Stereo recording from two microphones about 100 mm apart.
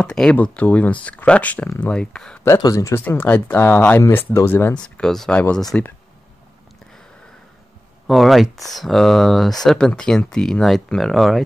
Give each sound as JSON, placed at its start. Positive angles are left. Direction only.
{"t": 0.0, "sound": "speech", "side_deg": 5}
{"t": 2.4, "sound": "speech", "side_deg": 35}
{"t": 3.0, "sound": "speech", "side_deg": 20}
{"t": 4.7, "sound": "speech", "side_deg": 10}
{"t": 8.1, "sound": "speech", "side_deg": 0}